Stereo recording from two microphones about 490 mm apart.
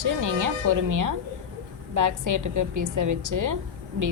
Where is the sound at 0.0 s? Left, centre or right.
Right.